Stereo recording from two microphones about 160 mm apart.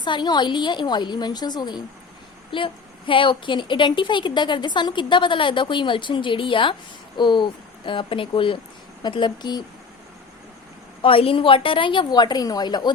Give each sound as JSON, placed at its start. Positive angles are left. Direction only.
{"t": 0.0, "sound": "a woman's voice", "side_deg": 25}
{"t": 11.0, "sound": "a woman's voice", "side_deg": 35}